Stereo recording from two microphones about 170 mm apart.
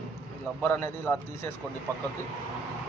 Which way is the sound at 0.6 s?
10° left (ahead or behind).